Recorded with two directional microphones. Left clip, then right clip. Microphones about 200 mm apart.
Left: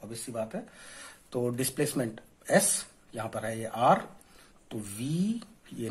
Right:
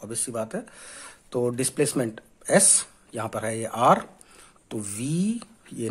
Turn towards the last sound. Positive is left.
turn(degrees=-30)  # may be behind; listen again after turning